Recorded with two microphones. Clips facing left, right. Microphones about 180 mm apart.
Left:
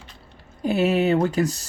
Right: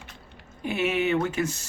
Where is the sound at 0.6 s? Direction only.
35° left (ahead or behind).